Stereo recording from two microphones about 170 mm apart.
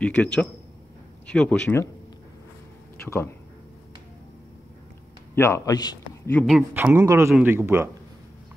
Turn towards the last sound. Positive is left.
turn(degrees=-15)  # may be behind; listen again after turning